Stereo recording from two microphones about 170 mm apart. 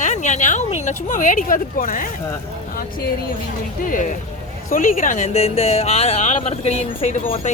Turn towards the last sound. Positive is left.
turn(degrees=40)  # may be behind; listen again after turning